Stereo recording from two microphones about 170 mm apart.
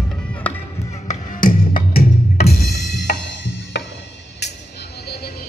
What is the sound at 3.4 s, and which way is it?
Music, 90° left.